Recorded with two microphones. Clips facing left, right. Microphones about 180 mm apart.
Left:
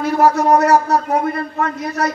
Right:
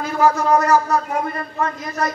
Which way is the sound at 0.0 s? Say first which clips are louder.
Left 3 dB; 70° left (ahead or behind).